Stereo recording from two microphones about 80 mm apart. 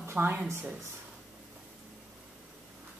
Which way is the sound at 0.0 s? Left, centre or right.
Right.